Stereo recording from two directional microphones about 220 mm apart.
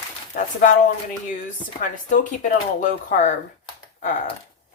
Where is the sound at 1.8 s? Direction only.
35° left (ahead or behind).